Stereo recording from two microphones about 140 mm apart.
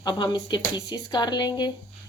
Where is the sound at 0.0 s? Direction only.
35° left (ahead or behind).